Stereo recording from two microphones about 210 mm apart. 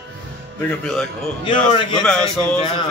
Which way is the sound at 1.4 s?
25° left (ahead or behind).